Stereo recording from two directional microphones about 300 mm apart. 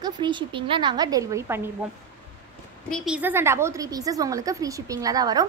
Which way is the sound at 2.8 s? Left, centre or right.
Centre.